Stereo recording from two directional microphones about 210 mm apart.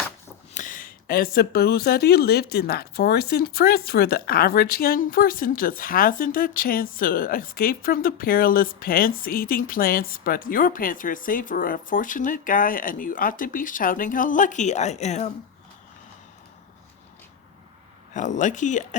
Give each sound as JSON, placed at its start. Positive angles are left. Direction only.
{"t": 0.5, "sound": "speech", "side_deg": 40}
{"t": 18.1, "sound": "speech", "side_deg": 35}